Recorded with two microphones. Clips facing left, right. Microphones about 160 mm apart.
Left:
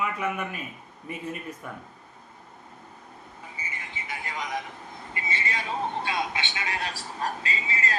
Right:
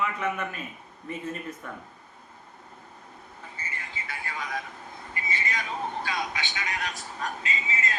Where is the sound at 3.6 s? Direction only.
15° left (ahead or behind).